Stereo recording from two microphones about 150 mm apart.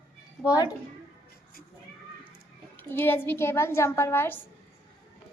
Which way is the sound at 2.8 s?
15° left (ahead or behind).